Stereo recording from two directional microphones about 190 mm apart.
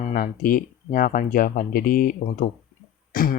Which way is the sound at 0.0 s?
50° left (ahead or behind).